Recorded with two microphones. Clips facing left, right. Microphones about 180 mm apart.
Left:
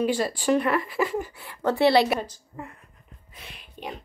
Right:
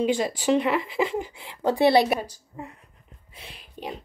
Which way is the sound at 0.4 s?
15° right (ahead or behind).